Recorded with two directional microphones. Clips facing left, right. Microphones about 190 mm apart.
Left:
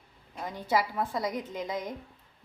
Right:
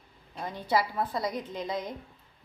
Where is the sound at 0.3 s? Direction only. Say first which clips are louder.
Even; 10° left (ahead or behind).